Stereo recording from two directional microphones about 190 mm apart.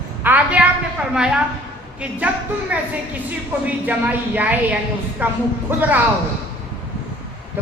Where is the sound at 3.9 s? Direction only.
10° right (ahead or behind).